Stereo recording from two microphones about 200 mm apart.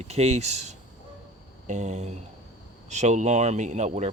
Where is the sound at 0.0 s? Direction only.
35° right (ahead or behind).